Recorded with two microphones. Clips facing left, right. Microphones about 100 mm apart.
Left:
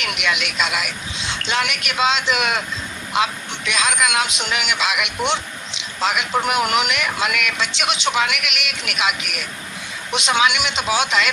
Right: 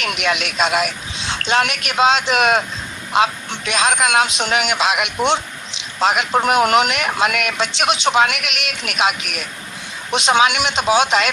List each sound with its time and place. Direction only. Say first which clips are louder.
0.0 s speech: right 3 dB; 40° right (ahead or behind)
10.8 s speech: right 8 dB; 30° right (ahead or behind)